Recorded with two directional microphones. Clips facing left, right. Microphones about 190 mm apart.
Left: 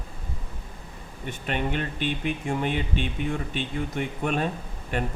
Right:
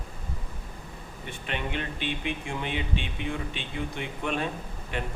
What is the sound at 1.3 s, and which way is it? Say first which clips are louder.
Speech: left 5 dB; 40° left (ahead or behind).